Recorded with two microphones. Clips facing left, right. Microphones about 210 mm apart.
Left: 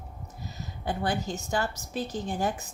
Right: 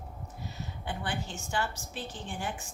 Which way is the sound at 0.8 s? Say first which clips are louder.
Left 7 dB; 40° left (ahead or behind).